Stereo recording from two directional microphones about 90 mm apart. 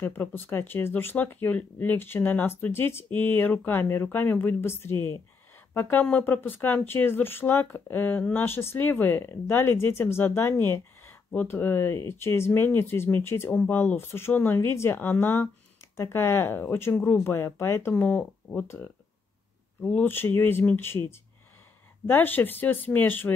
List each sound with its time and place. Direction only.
0.0 s speech: 25° left (ahead or behind)
18.0 s speech: 15° left (ahead or behind)
19.8 s speech: 15° left (ahead or behind)